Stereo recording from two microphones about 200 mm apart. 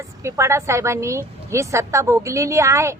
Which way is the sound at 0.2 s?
15° right (ahead or behind).